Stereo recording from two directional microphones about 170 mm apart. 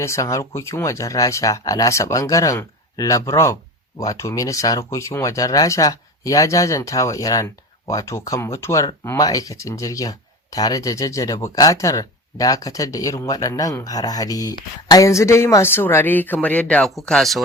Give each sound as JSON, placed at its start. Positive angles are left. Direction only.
{"t": 0.0, "sound": "speech", "side_deg": 15}